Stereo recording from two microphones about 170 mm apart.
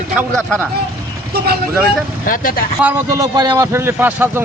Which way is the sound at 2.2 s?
55° left (ahead or behind).